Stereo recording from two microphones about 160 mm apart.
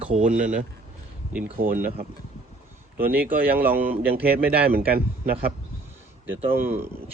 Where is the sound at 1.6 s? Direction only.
60° right (ahead or behind).